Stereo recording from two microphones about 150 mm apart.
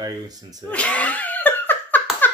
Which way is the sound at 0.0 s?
25° right (ahead or behind).